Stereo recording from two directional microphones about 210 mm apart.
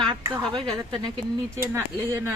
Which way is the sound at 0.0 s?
20° right (ahead or behind).